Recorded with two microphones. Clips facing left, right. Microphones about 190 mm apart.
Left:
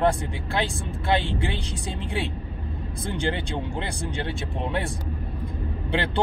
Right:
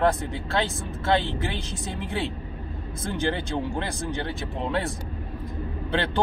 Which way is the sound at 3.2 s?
15° left (ahead or behind).